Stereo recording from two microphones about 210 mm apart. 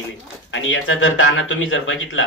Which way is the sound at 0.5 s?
65° left (ahead or behind).